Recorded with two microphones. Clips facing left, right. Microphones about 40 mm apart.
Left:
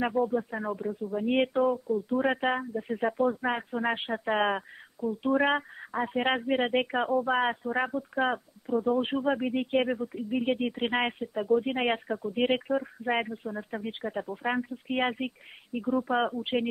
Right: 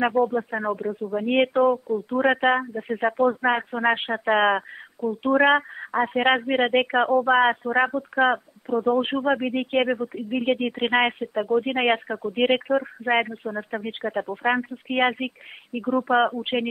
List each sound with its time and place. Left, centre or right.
0.0 s speech: right